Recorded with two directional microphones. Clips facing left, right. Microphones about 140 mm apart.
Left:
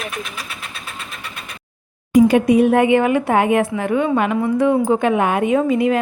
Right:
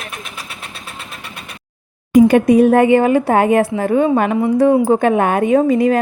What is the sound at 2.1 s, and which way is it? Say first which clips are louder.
Speech: right 3 dB; 50° right (ahead or behind).